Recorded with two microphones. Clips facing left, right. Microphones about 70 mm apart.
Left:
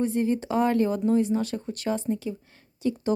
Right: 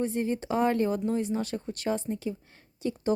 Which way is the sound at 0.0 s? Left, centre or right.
Centre.